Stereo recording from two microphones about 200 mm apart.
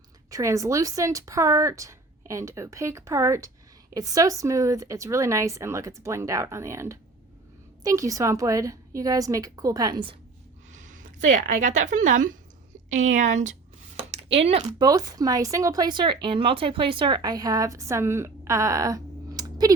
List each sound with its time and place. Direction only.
0.3 s a woman's voice: 15° right (ahead or behind)
10.7 s a woman's voice: 40° right (ahead or behind); by 19.7 s 20° right (ahead or behind)